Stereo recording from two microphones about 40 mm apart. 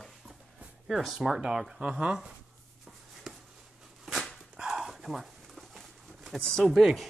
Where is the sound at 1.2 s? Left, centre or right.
Centre.